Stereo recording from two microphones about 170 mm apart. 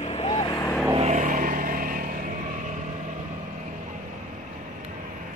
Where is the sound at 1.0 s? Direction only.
45° right (ahead or behind).